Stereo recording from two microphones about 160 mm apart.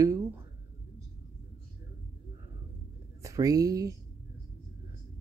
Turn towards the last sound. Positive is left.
turn(degrees=-20)  # may be behind; listen again after turning